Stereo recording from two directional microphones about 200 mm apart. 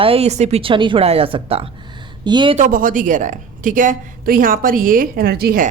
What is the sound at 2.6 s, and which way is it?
A woman's voice, 40° right (ahead or behind).